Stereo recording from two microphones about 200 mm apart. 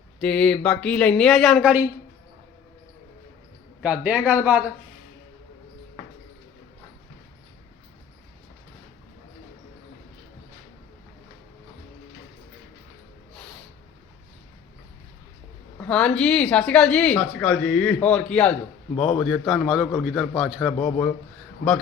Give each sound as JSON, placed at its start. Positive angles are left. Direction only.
{"t": 0.2, "sound": "speech", "side_deg": 5}
{"t": 3.8, "sound": "speech", "side_deg": -5}
{"t": 15.8, "sound": "speech", "side_deg": 5}